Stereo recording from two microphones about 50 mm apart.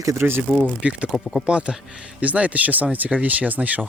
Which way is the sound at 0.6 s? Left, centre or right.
Right.